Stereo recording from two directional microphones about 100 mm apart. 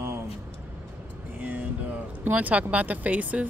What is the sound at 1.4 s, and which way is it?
Speech, 15° right (ahead or behind).